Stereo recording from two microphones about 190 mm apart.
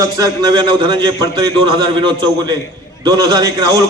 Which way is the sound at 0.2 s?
20° right (ahead or behind).